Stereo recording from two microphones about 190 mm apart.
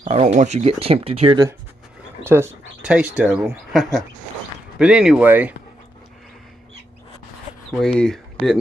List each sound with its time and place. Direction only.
0.0 s speech: 35° right (ahead or behind)
2.2 s speech: 10° right (ahead or behind)
7.8 s speech: 5° left (ahead or behind)